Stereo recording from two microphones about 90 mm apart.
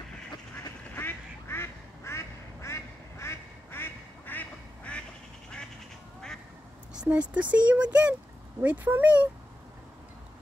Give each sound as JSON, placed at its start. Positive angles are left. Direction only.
{"t": 0.9, "sound": "quack", "side_deg": 25}
{"t": 7.0, "sound": "speech", "side_deg": -15}